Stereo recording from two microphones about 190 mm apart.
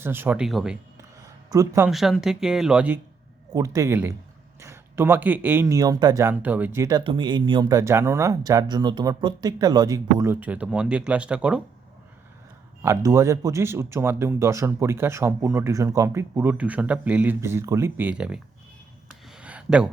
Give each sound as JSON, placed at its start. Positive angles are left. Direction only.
{"t": 0.0, "sound": "speech", "side_deg": -10}
{"t": 1.5, "sound": "speech", "side_deg": -15}
{"t": 1.9, "sound": "speech", "side_deg": 0}
{"t": 3.5, "sound": "speech", "side_deg": -15}
{"t": 7.0, "sound": "speech", "side_deg": -25}
{"t": 12.8, "sound": "speech", "side_deg": -15}
{"t": 19.0, "sound": "a sound", "side_deg": -5}